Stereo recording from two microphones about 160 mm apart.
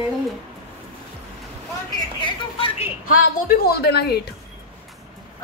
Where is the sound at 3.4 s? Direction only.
75° left (ahead or behind).